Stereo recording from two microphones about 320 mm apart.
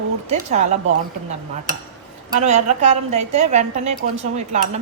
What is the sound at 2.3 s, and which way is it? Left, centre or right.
A woman's voice, right.